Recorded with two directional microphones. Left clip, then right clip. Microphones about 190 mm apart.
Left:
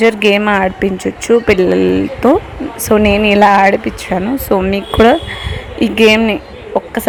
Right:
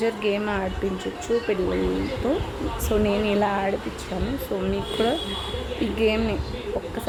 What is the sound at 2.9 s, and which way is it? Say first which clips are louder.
Speech: left 13 dB; 45° left (ahead or behind).